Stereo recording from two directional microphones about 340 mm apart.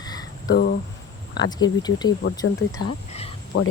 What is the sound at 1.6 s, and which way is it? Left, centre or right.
Speech, centre.